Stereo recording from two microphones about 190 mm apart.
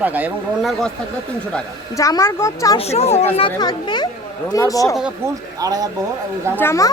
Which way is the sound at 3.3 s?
25° left (ahead or behind).